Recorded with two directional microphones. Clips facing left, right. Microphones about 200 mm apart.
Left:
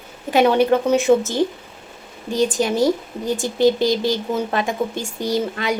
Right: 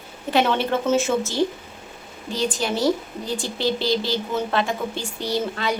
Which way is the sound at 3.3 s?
15° left (ahead or behind).